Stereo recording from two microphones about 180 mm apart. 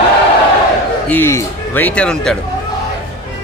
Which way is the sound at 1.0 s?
10° left (ahead or behind).